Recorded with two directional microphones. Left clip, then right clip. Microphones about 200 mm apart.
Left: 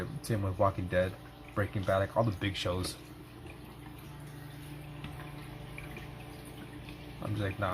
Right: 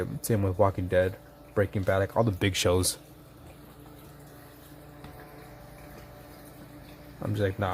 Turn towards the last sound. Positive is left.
turn(degrees=-50)  # may be behind; listen again after turning